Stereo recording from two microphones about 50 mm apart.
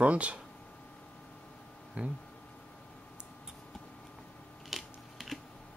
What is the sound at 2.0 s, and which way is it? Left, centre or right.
Speech, right.